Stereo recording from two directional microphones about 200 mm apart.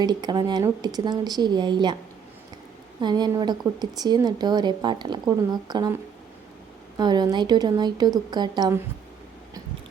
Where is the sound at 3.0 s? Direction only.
20° right (ahead or behind).